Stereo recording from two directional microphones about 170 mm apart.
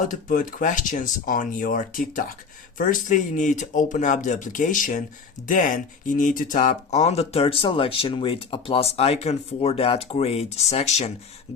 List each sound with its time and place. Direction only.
0.1 s speech: 50° left (ahead or behind)